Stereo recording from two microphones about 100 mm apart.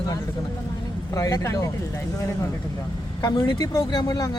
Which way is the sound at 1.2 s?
35° left (ahead or behind).